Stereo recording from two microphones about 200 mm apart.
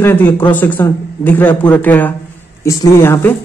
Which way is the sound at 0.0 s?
10° left (ahead or behind).